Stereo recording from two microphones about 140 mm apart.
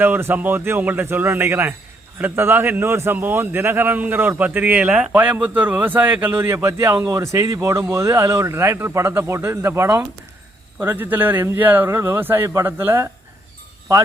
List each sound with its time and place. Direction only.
0.0 s a man's voice: 15° right (ahead or behind)